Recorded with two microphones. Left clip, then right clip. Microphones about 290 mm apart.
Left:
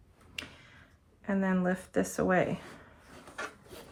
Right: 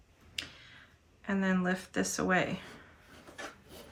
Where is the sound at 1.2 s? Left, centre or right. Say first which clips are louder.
Left 1 dB; centre.